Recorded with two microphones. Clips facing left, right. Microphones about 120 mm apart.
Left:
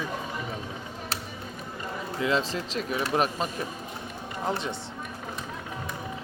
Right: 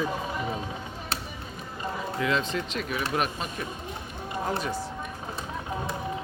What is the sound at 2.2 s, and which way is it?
Speech, 30° left (ahead or behind).